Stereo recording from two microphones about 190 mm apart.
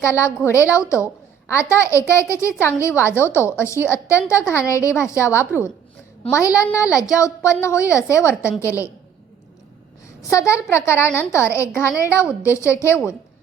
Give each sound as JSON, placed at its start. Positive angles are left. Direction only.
{"t": 0.0, "sound": "a child's voice", "side_deg": 15}
{"t": 10.2, "sound": "a child's voice", "side_deg": 15}